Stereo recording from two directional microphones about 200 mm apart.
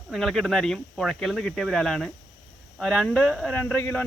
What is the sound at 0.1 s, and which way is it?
Speech, centre (ahead or behind).